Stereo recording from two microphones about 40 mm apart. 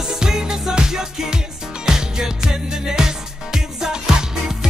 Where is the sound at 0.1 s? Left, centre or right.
Centre.